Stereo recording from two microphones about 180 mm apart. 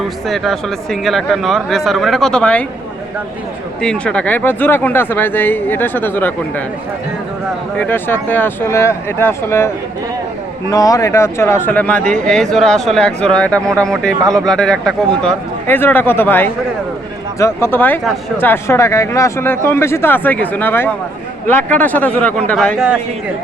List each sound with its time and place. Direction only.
0.3 s speech: centre (ahead or behind)
3.8 s speech: 5° left (ahead or behind)
7.8 s speech: 10° left (ahead or behind)
14.2 s speech: 20° right (ahead or behind)
14.4 s speech: 5° left (ahead or behind)